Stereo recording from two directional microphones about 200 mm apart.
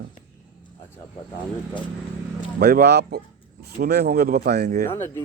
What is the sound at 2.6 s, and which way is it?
Speech, 55° right (ahead or behind).